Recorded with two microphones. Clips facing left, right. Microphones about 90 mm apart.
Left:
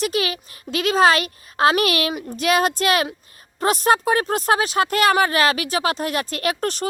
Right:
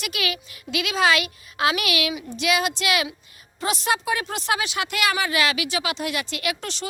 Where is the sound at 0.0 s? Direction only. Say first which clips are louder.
Left 6 dB; 35° left (ahead or behind).